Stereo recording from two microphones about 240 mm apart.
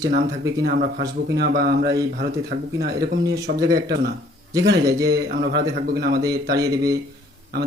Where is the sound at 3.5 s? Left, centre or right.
Right.